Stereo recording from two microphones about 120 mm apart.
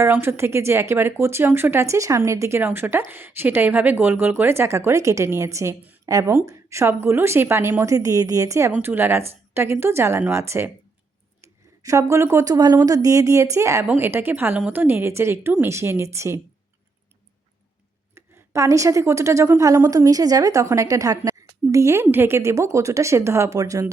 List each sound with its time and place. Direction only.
0.0 s a woman's voice: 20° right (ahead or behind)
11.8 s a woman's voice: 25° right (ahead or behind)
18.1 s a woman's voice: 25° right (ahead or behind)